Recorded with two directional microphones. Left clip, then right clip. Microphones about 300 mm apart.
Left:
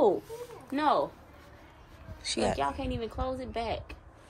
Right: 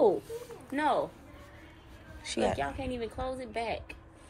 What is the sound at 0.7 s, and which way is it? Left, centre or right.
Speech, left.